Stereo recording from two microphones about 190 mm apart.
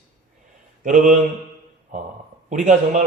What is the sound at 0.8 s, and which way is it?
Mantra, 40° right (ahead or behind).